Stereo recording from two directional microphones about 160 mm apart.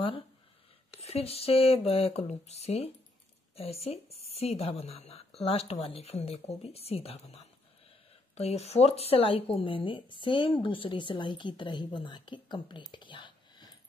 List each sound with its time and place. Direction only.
1.0 s speech: 40° left (ahead or behind)